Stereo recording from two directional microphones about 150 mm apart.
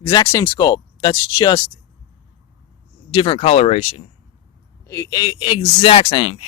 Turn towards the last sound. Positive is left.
turn(degrees=40)  # may be behind; listen again after turning